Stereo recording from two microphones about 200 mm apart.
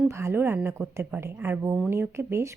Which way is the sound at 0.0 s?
15° right (ahead or behind).